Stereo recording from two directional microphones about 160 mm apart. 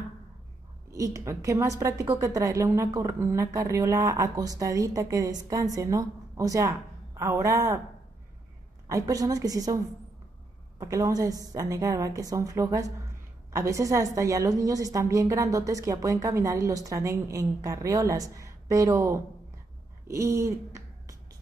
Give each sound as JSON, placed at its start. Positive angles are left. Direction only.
{"t": 0.9, "sound": "a woman's voice", "side_deg": -20}
{"t": 8.8, "sound": "a woman's voice", "side_deg": -20}
{"t": 10.8, "sound": "a woman's voice", "side_deg": -20}
{"t": 20.1, "sound": "a sound", "side_deg": -15}